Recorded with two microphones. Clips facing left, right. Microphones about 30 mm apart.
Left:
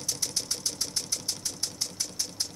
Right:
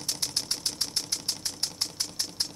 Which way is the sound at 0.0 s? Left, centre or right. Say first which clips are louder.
Right 1 dB; right.